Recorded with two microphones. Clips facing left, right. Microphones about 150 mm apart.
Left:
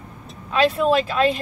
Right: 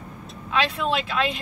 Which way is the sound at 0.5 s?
40° left (ahead or behind).